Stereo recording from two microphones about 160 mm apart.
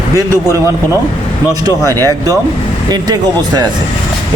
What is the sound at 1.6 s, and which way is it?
A man's voice, 20° right (ahead or behind).